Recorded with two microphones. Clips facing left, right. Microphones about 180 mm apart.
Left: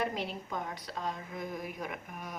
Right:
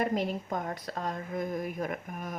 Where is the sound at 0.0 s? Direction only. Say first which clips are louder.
Right 5 dB; 45° right (ahead or behind).